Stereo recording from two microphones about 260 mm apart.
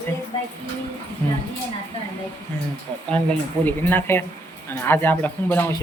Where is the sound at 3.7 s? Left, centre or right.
Centre.